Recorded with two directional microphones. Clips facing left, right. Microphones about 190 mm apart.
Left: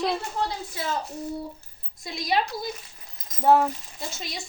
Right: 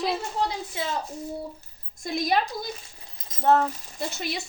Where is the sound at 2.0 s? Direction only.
50° right (ahead or behind).